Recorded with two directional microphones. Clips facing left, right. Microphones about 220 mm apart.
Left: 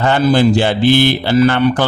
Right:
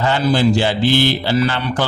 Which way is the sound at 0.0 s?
55° left (ahead or behind).